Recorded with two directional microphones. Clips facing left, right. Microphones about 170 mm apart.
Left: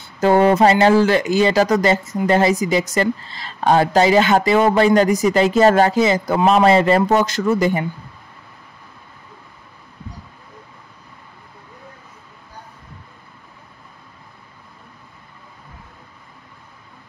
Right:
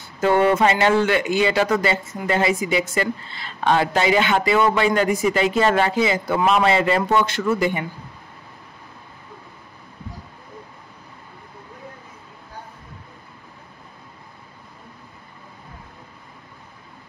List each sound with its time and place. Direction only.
0.2 s speech: 35° left (ahead or behind)